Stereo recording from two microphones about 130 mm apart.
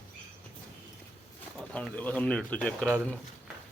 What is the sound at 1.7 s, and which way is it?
A man's voice, 10° left (ahead or behind).